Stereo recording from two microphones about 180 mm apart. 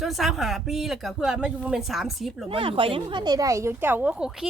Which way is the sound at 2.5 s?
30° right (ahead or behind).